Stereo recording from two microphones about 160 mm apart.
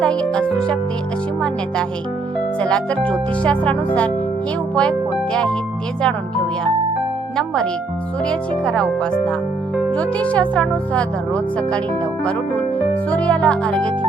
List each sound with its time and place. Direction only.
0.0 s speech: 5° left (ahead or behind)
2.6 s speech: 5° left (ahead or behind)
7.3 s speech: 5° left (ahead or behind)
13.1 s speech: 10° left (ahead or behind)